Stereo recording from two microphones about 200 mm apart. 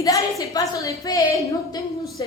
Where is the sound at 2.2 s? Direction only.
20° left (ahead or behind).